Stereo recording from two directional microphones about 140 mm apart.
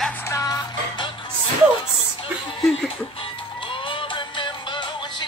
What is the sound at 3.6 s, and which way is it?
Music, 35° left (ahead or behind).